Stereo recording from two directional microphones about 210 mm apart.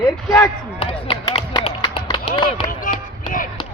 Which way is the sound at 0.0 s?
15° left (ahead or behind).